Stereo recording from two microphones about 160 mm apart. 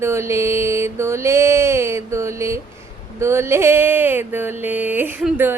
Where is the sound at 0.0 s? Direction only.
15° right (ahead or behind).